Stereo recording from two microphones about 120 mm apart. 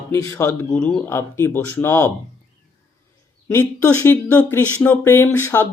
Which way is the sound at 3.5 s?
20° left (ahead or behind).